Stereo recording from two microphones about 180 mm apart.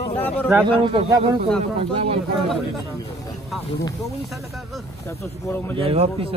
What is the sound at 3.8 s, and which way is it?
Speech, 20° left (ahead or behind).